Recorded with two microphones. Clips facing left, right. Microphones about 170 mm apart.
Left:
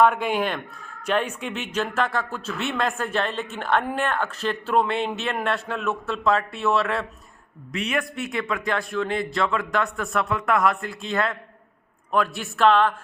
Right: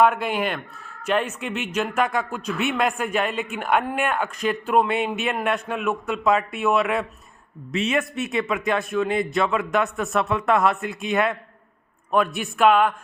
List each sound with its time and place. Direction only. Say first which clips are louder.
0.0 s a man's voice: even; 5° right (ahead or behind)